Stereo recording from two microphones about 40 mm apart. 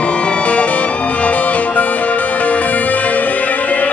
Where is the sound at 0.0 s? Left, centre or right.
Left.